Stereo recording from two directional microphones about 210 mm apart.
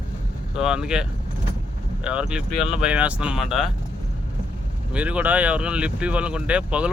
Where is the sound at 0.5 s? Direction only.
5° right (ahead or behind).